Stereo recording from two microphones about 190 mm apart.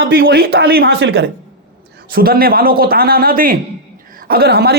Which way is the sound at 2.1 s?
50° right (ahead or behind).